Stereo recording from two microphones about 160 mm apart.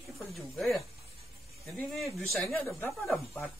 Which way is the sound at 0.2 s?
Centre (ahead or behind).